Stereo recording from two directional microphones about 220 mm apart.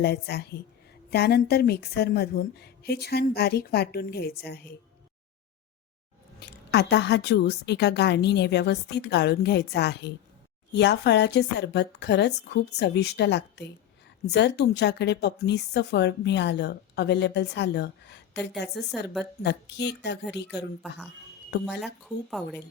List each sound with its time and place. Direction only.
0.0 s speech: 50° left (ahead or behind)
6.4 s speech: 50° left (ahead or behind)
21.8 s speech: centre (ahead or behind)